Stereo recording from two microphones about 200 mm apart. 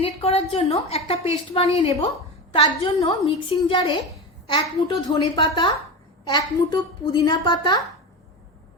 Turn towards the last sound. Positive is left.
turn(degrees=20)  # may be behind; listen again after turning